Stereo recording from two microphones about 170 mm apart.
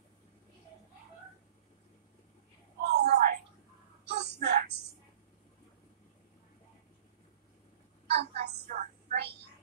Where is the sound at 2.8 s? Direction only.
80° right.